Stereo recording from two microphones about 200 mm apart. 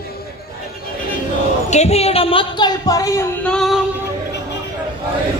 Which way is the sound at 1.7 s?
35° left (ahead or behind).